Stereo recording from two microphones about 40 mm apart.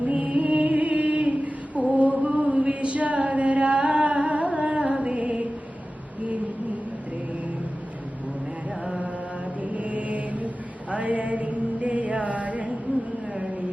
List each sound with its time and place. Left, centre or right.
0.0 s music: right
1.7 s chant: right
9.6 s mantra: right
10.9 s a sound: right